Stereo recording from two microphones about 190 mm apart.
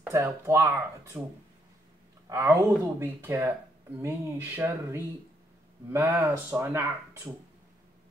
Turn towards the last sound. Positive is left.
turn(degrees=-10)  # may be behind; listen again after turning